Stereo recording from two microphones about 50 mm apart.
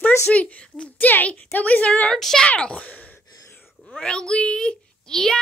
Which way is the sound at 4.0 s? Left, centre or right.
Centre.